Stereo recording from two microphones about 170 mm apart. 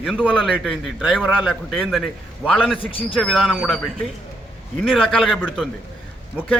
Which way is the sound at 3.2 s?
Centre (ahead or behind).